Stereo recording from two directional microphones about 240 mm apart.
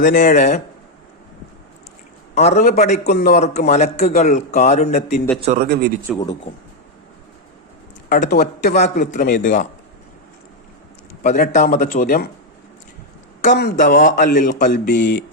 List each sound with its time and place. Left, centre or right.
0.0 s a man's voice: left
2.3 s a man's voice: left
5.4 s a man's voice: right
8.1 s a man's voice: left
11.2 s a man's voice: left
13.6 s a man's voice: left